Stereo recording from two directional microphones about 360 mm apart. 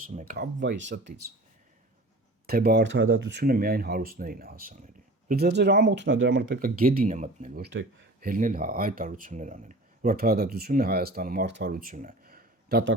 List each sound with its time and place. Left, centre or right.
0.0 s speech: right
2.5 s speech: right